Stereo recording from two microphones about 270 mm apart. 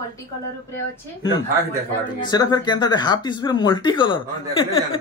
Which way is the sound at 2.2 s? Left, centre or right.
Centre.